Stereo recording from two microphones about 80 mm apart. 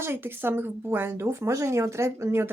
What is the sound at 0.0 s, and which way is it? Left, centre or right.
Speech, right.